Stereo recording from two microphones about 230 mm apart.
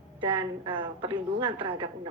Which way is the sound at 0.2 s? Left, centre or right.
Right.